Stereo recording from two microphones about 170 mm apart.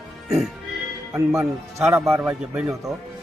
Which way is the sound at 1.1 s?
15° right (ahead or behind).